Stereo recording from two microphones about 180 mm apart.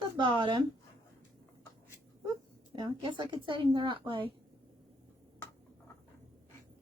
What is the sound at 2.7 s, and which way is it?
A woman's voice, 25° right (ahead or behind).